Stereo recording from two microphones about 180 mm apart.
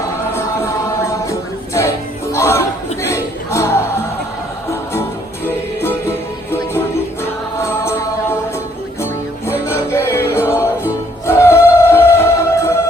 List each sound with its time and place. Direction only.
1.3 s music: 15° left (ahead or behind)
5.5 s music: 10° left (ahead or behind)
7.6 s mantra: 15° left (ahead or behind)
9.5 s music: 15° left (ahead or behind)